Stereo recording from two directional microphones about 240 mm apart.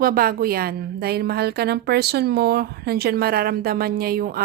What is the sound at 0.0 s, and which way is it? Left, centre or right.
A woman's voice, right.